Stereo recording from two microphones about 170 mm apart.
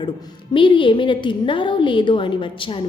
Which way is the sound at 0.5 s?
30° left (ahead or behind).